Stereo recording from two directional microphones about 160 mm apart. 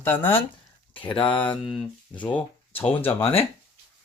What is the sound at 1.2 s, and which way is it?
Speech, 10° left (ahead or behind).